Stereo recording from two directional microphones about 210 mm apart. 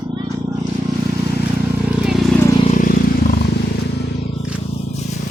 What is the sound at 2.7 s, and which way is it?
Vehicle, 40° left (ahead or behind).